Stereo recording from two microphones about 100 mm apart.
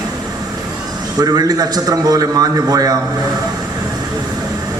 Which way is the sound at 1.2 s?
40° right (ahead or behind).